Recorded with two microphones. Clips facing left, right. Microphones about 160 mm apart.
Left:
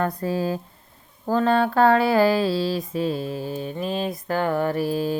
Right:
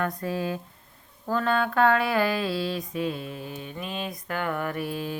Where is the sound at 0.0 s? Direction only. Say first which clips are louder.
Left 4 dB; 35° left (ahead or behind).